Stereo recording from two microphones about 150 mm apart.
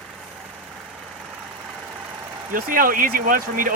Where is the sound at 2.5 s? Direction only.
65° right (ahead or behind).